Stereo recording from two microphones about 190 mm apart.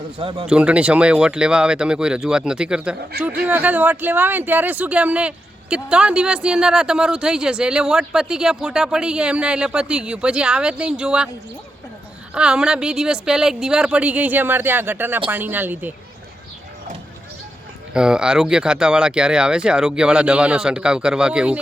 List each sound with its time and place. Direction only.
0.2 s speech: 30° right (ahead or behind)
0.4 s speech: 5° right (ahead or behind)
12.3 s speech: 5° right (ahead or behind)
17.9 s speech: 5° right (ahead or behind)